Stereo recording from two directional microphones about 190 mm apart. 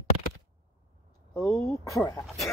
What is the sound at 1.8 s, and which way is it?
Speech, 15° left (ahead or behind).